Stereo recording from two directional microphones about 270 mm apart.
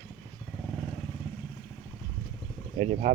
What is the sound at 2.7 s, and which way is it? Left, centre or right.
Speech, right.